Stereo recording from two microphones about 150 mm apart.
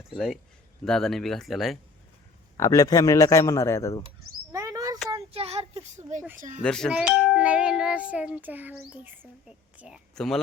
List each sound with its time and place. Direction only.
0.9 s speech: 5° left (ahead or behind)
2.6 s a man's voice: 20° left (ahead or behind)
4.5 s a sound: 20° right (ahead or behind)
5.3 s a sound: 40° right (ahead or behind)
6.6 s speech: 5° left (ahead or behind)
6.9 s music: 5° right (ahead or behind)
9.7 s speech: 5° right (ahead or behind)